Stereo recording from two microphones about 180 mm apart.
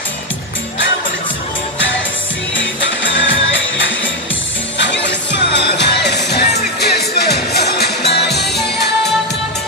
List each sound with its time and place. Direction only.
2.5 s music: 90° left
4.7 s music: 80° left